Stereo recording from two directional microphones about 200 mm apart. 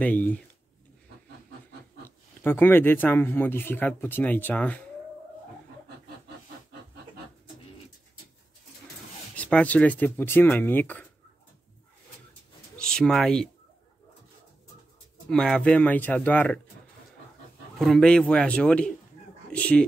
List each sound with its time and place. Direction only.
0.0 s speech: 10° left (ahead or behind)
2.0 s speech: 10° left (ahead or behind)
9.3 s speech: 5° left (ahead or behind)
12.7 s speech: 5° left (ahead or behind)
15.2 s speech: centre (ahead or behind)
17.7 s speech: centre (ahead or behind)